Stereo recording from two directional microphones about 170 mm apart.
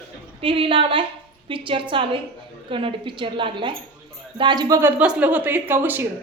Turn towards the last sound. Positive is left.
turn(degrees=-10)  # may be behind; listen again after turning